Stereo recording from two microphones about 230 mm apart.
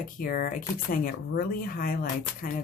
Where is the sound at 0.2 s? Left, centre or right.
Left.